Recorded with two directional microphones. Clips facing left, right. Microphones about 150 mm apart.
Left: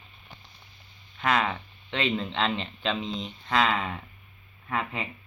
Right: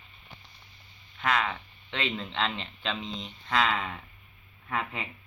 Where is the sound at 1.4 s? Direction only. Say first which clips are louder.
Left 3 dB; 20° left (ahead or behind).